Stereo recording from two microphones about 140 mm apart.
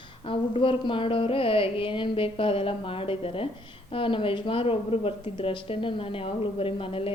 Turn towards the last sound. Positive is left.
turn(degrees=45)  # may be behind; listen again after turning